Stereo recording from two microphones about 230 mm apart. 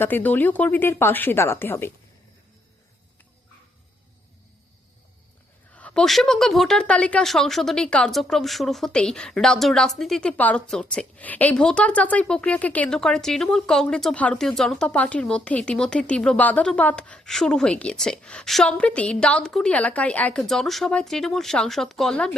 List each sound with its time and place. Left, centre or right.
0.0 s speech: centre
5.7 s a woman's voice: centre